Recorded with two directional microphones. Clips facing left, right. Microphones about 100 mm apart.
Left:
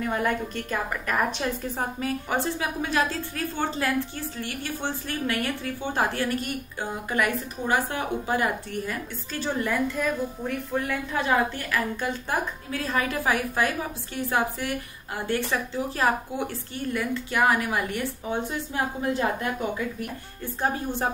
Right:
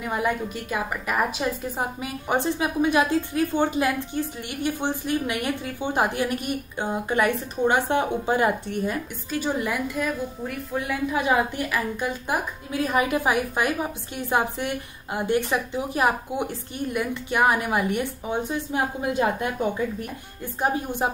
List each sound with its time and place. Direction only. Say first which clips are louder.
0.0 s a woman's voice: right 1 dB; 10° right (ahead or behind)
20.6 s a woman's voice: right 2 dB; 15° right (ahead or behind)